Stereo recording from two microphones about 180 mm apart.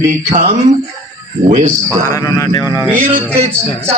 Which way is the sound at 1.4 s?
40° right (ahead or behind).